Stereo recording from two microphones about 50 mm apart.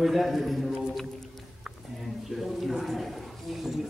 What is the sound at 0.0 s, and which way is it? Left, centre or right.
A man's voice, centre.